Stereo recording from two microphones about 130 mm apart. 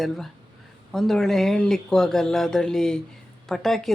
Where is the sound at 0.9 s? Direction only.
5° left (ahead or behind).